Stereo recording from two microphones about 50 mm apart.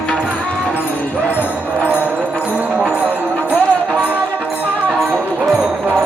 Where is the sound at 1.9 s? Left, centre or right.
Right.